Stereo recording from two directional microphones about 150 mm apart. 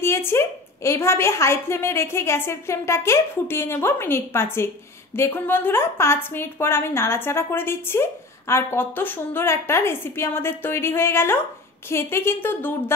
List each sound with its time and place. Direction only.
0.0 s a woman's voice: 15° left (ahead or behind)